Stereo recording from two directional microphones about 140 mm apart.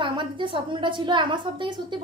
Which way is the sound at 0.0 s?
35° right (ahead or behind).